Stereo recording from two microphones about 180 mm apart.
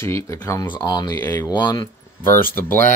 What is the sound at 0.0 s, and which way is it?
Speech, 15° left (ahead or behind).